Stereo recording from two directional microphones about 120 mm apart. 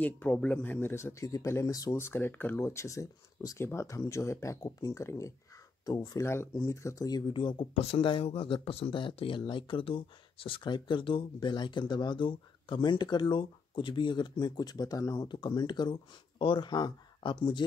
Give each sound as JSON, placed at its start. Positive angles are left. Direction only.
{"t": 0.0, "sound": "speech", "side_deg": 15}
{"t": 6.2, "sound": "speech", "side_deg": 20}